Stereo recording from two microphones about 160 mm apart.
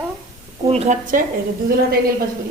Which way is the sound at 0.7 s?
45° right (ahead or behind).